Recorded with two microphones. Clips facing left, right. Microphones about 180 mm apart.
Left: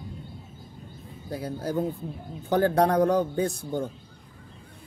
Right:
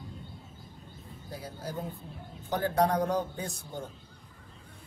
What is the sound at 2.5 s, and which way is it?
Speech, 75° left (ahead or behind).